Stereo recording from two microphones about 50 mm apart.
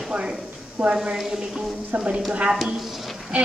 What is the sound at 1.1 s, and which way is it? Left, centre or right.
Speech, centre.